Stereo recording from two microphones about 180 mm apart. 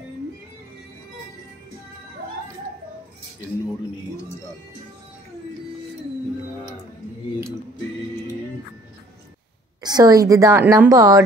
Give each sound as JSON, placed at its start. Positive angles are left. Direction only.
{"t": 9.8, "sound": "a woman's voice", "side_deg": -20}